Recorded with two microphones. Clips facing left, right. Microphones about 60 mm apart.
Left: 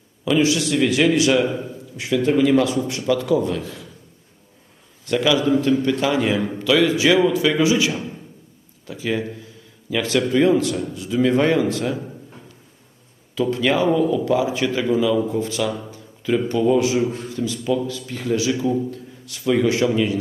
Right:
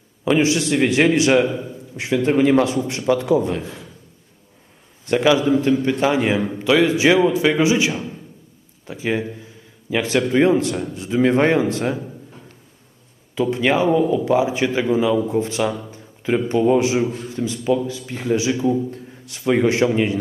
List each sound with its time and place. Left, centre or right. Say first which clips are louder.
0.3 s a man's voice: right 1 dB; right
5.0 s a man's voice: right 2 dB; right
7.9 s a sound: right 1 dB; centre
8.9 s a man's voice: right 1 dB; right
13.3 s a man's voice: right 1 dB; right
15.9 s a sound: even; right
16.5 s a man's voice: right 2 dB; right